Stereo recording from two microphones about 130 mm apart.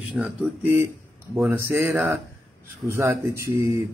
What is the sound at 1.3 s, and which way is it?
Speech, 15° right (ahead or behind).